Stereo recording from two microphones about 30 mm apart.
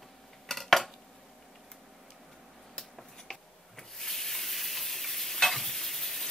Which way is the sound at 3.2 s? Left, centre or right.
Centre.